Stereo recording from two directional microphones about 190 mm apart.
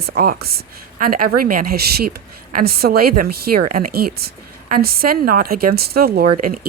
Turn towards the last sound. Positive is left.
turn(degrees=-50)  # may be behind; listen again after turning